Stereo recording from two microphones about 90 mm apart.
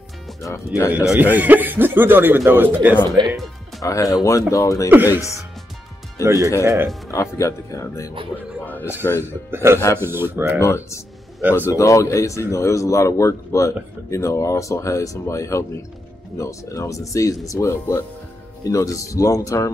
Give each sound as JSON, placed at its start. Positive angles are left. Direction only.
{"t": 0.8, "sound": "speech", "side_deg": -15}
{"t": 3.8, "sound": "speech", "side_deg": 40}
{"t": 4.8, "sound": "speech", "side_deg": -20}
{"t": 6.2, "sound": "speech", "side_deg": -30}
{"t": 7.1, "sound": "speech", "side_deg": 35}
{"t": 8.3, "sound": "a man's voice", "side_deg": 15}
{"t": 8.8, "sound": "speech", "side_deg": 30}
{"t": 9.5, "sound": "speech", "side_deg": -25}
{"t": 10.6, "sound": "speech", "side_deg": 30}